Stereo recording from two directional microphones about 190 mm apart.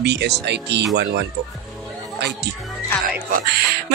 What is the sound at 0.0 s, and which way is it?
Speech, 60° right (ahead or behind).